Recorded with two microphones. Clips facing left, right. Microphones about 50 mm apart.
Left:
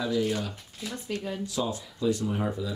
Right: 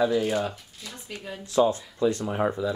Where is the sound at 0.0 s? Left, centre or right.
Right.